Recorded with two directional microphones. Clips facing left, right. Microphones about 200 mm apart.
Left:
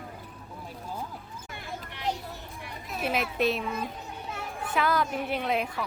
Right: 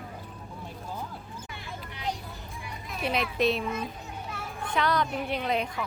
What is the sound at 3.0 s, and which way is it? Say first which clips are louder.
A woman's voice: right 1 dB; 5° left (ahead or behind).